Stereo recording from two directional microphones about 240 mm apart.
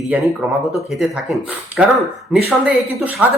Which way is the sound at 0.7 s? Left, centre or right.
Centre.